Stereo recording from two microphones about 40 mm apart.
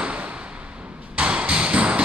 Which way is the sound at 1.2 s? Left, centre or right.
Right.